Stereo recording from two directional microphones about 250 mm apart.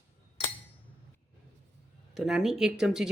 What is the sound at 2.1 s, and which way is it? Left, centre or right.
Speech, centre.